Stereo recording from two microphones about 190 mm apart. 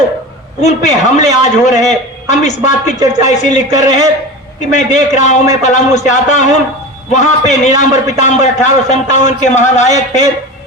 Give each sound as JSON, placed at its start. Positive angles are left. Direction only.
{"t": 0.6, "sound": "a man's voice", "side_deg": 40}